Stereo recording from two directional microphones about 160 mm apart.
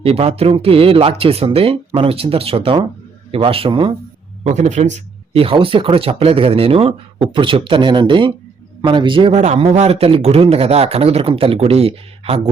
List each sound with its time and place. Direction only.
0.0 s speech: 35° right (ahead or behind)
4.4 s speech: 45° right (ahead or behind)